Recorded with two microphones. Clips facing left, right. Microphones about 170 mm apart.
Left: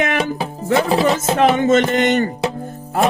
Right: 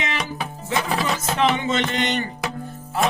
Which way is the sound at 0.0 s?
55° left (ahead or behind).